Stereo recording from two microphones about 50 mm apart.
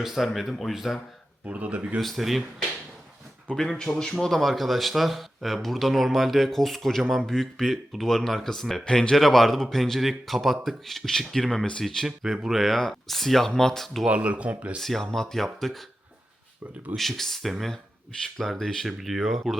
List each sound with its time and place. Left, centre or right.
0.0 s speech: centre
1.5 s speech: right
2.0 s speech: centre
3.5 s speech: centre
9.1 s speech: centre
12.0 s speech: centre
12.6 s speech: centre
14.1 s speech: right
14.8 s speech: centre
16.9 s speech: centre
18.9 s speech: centre